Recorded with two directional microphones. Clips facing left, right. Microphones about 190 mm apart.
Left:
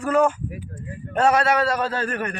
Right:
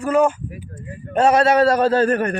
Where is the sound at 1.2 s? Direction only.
25° right (ahead or behind); by 2.3 s 40° right (ahead or behind).